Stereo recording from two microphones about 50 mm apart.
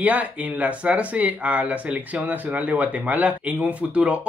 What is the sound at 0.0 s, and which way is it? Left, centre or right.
Speech, right.